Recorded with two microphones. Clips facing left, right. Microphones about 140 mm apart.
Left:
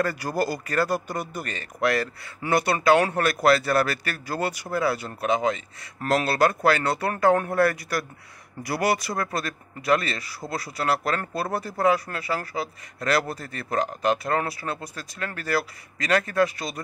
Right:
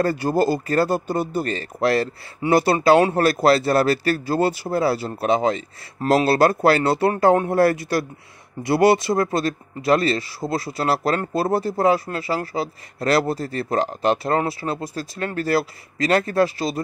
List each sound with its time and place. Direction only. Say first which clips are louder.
0.0 s speech: right 6 dB; 25° right (ahead or behind)